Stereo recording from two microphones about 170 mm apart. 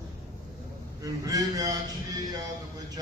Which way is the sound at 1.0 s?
20° right (ahead or behind).